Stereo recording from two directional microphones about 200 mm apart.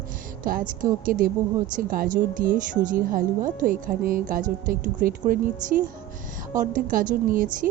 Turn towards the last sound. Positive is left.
turn(degrees=-45)  # may be behind; listen again after turning